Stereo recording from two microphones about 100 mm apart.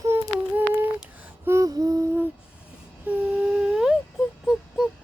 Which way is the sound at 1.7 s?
40° right (ahead or behind).